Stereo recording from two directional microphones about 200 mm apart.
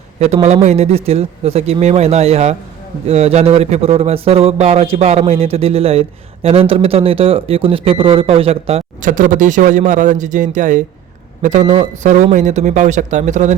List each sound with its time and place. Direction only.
0.4 s a man's voice: 35° right (ahead or behind)